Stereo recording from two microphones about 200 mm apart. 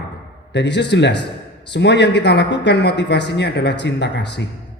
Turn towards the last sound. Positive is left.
turn(degrees=60)  # may be behind; listen again after turning